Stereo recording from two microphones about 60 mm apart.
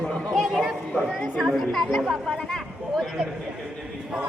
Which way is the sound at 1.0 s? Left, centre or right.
Centre.